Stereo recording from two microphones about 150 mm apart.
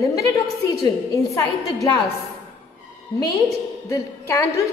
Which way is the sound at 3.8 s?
20° left (ahead or behind).